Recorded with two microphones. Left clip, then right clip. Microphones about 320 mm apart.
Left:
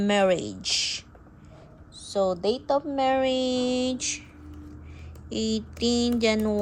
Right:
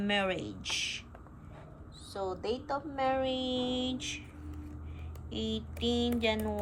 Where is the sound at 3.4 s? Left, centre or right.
Left.